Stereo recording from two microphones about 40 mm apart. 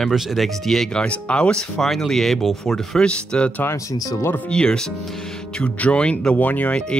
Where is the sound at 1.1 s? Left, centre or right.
Left.